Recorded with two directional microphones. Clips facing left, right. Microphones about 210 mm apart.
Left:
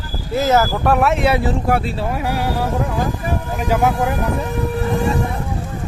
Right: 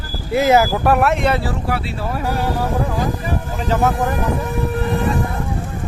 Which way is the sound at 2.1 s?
10° left (ahead or behind).